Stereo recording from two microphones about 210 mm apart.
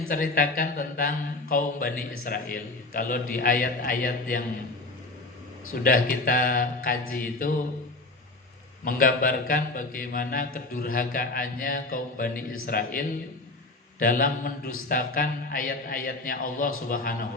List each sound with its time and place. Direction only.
0.1 s speech: 40° left (ahead or behind)
5.8 s a man's voice: 40° left (ahead or behind)
8.8 s a man's voice: 40° left (ahead or behind)